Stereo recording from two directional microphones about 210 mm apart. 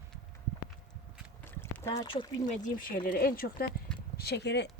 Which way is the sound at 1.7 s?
15° left (ahead or behind).